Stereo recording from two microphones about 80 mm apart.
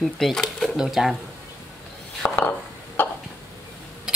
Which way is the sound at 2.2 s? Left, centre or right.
Left.